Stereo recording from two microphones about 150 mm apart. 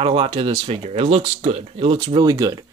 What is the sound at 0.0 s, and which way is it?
Speech, 35° right (ahead or behind).